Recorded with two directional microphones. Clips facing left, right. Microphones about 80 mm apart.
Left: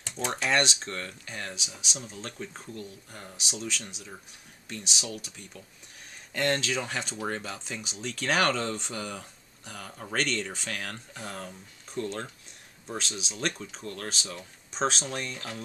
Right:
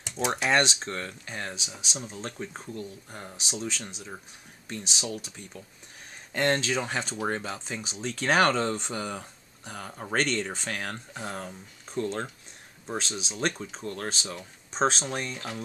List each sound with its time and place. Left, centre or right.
0.0 s speech: centre
0.5 s speech: right